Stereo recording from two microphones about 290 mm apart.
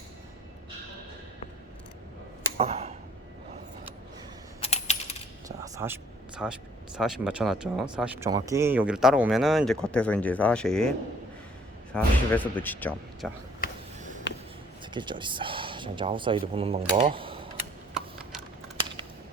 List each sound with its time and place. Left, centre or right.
2.6 s speech: right
4.6 s coin: left
5.5 s a sound: centre
6.9 s speech: centre
14.9 s speech: centre